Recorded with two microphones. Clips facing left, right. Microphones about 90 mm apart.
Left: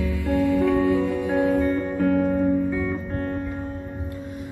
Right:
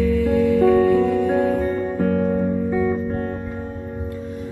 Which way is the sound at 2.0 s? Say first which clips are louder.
Left 1 dB; 5° right (ahead or behind).